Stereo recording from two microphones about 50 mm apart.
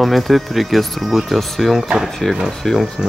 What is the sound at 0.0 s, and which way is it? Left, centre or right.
Speech, centre.